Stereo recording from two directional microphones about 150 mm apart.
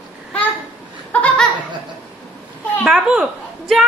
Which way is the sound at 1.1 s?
10° left (ahead or behind).